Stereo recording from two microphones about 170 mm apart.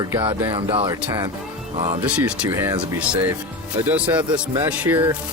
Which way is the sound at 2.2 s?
10° right (ahead or behind).